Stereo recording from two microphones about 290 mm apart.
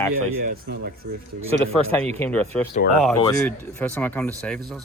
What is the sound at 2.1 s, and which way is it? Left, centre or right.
Speech, centre.